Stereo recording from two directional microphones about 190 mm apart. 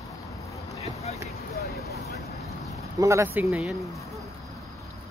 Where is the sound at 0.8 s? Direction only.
35° left (ahead or behind).